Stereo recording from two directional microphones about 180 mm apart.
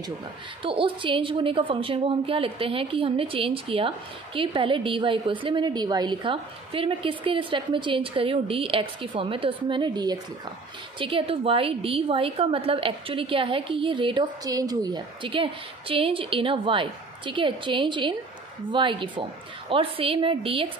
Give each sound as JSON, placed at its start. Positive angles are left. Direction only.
{"t": 0.6, "sound": "a woman's voice", "side_deg": -30}